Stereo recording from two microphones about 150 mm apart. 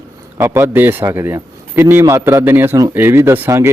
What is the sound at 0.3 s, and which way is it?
A man's voice, 20° right (ahead or behind).